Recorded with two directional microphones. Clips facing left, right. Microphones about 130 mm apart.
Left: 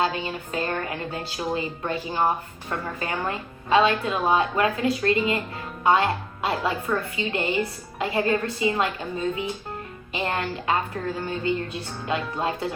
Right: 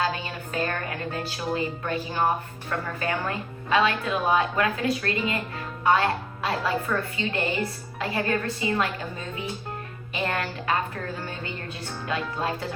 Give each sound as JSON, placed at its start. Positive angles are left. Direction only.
{"t": 0.0, "sound": "speech", "side_deg": 25}
{"t": 10.2, "sound": "speech", "side_deg": 25}